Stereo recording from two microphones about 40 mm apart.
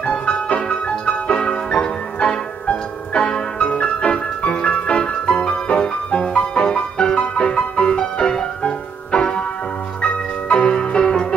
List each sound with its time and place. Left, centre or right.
0.0 s music: left